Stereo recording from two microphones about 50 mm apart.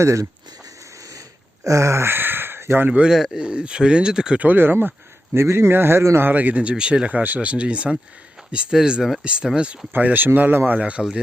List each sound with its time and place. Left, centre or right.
1.6 s a sound: right
2.0 s a sound: right
3.3 s speech: centre
4.4 s speech: right
5.4 s speech: right
6.1 s speech: right; by 7.1 s centre
7.1 s speech: right
7.3 s speech: right
9.9 s speech: right
10.8 s speech: right